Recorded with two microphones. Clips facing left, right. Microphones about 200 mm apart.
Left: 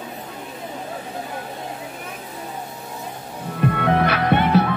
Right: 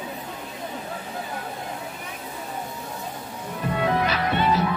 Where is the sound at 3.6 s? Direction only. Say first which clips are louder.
Left 4 dB; 60° left (ahead or behind).